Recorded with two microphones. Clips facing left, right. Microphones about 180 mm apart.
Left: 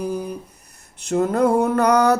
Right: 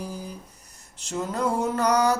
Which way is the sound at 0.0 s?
60° left (ahead or behind).